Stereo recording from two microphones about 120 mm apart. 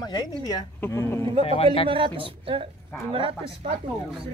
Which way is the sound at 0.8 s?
20° left (ahead or behind).